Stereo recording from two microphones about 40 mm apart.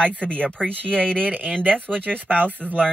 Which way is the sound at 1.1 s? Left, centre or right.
Right.